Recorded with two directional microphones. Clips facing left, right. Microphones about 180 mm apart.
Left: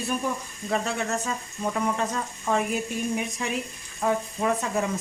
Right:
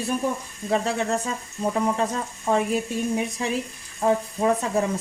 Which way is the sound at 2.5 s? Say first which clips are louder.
Right 3 dB; 30° right (ahead or behind).